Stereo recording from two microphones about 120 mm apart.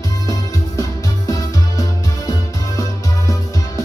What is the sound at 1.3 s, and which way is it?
Music, 30° left (ahead or behind).